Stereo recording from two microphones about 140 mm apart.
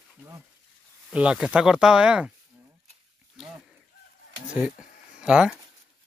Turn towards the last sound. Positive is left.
turn(degrees=-5)  # may be behind; listen again after turning